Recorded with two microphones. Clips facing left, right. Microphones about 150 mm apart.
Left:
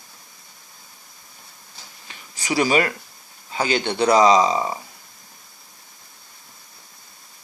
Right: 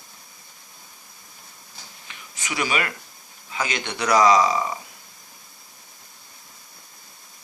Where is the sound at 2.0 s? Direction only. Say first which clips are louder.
Left 7 dB; 35° left (ahead or behind).